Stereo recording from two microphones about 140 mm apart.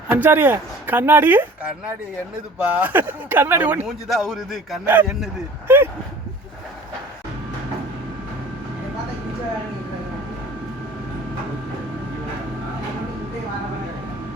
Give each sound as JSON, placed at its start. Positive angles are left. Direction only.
{"t": 0.1, "sound": "speech", "side_deg": -15}
{"t": 4.1, "sound": "speech", "side_deg": 0}
{"t": 5.6, "sound": "speech", "side_deg": -15}